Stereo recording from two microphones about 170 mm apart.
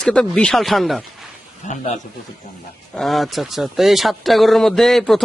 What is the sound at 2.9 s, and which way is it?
Speech, centre (ahead or behind).